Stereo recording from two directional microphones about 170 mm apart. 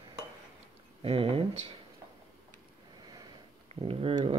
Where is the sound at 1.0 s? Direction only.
35° right (ahead or behind).